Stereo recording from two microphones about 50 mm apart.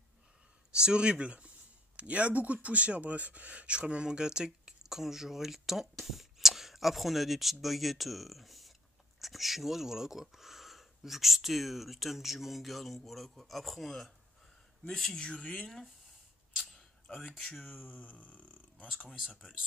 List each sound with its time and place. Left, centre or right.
0.7 s speech: centre
16.7 s a sound: centre
17.3 s speech: centre; by 18.9 s left